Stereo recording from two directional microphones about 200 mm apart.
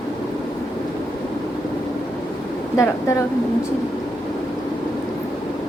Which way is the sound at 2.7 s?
15° left (ahead or behind).